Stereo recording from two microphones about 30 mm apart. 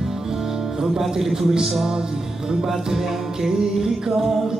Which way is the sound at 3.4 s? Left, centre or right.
Right.